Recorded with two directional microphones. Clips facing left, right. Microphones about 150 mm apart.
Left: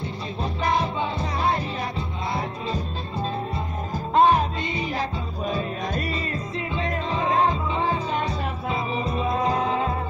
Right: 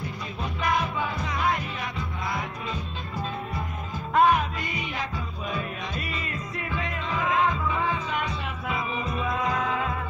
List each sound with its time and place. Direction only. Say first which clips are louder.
0.0 s music: left 4 dB; 30° left (ahead or behind)